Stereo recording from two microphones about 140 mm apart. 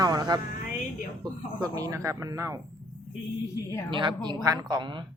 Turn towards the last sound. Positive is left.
turn(degrees=-35)  # may be behind; listen again after turning